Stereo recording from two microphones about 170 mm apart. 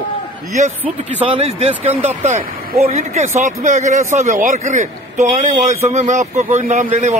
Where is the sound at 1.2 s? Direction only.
35° right (ahead or behind).